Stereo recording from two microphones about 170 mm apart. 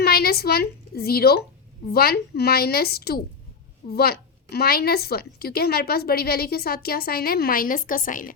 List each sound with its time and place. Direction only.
0.0 s a woman's voice: 65° left (ahead or behind)